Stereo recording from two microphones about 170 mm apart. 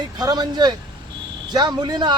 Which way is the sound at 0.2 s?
25° right (ahead or behind).